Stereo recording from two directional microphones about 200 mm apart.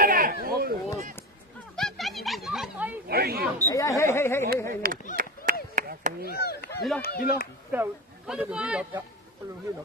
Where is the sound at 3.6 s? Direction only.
15° left (ahead or behind).